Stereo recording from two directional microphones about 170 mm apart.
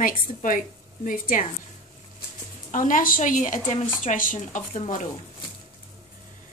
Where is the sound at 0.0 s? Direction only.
50° left (ahead or behind).